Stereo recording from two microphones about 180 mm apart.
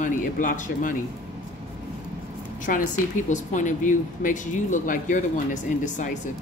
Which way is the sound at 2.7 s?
50° left (ahead or behind).